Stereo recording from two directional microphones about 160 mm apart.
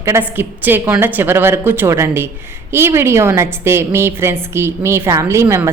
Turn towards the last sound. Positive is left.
turn(degrees=-15)  # may be behind; listen again after turning